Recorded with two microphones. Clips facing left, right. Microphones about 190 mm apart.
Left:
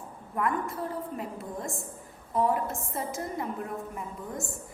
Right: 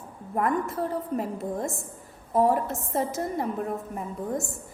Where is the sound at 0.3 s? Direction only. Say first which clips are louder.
Right 4 dB; 40° right (ahead or behind).